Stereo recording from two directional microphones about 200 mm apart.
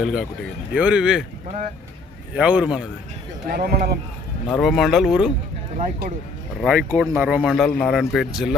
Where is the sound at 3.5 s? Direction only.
50° right (ahead or behind).